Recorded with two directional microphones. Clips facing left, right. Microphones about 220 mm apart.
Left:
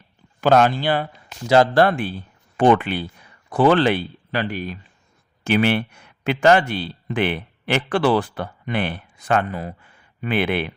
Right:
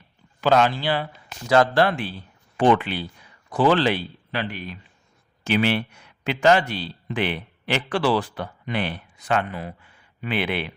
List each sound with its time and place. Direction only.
0.4 s speech: 50° left (ahead or behind)
5.4 s speech: 55° left (ahead or behind)